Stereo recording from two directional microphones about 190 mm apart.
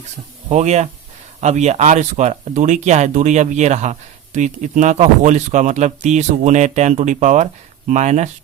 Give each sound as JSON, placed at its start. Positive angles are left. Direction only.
{"t": 0.5, "sound": "speech", "side_deg": -35}